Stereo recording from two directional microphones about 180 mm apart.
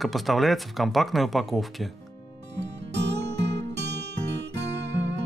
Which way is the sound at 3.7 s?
70° right (ahead or behind).